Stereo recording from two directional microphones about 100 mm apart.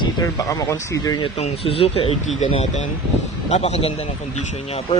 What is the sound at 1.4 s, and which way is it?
Speech, 80° left.